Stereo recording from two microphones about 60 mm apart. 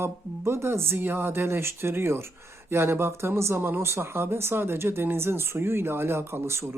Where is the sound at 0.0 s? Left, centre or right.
Right.